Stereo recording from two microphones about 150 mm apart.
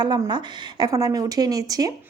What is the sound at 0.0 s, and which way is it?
A woman's voice, 30° right (ahead or behind).